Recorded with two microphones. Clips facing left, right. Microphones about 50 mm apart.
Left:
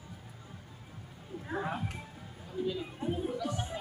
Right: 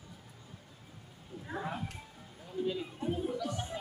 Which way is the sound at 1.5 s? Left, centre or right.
Left.